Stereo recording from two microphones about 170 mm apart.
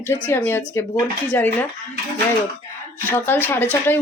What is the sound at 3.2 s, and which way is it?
Speech, 10° left (ahead or behind).